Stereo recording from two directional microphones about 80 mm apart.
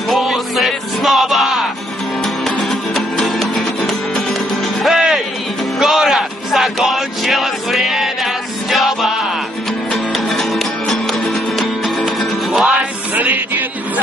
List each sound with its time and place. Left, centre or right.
0.1 s music: centre
2.7 s music: centre
10.1 s music: centre
13.1 s music: right